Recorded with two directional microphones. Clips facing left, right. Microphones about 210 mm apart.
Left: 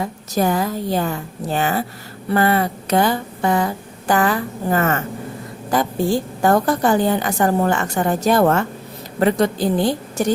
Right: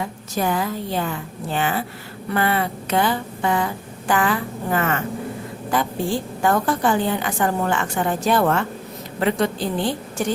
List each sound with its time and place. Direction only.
0.0 s a woman's voice: 40° left (ahead or behind)